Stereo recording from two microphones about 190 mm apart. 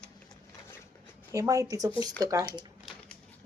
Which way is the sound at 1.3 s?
15° right (ahead or behind).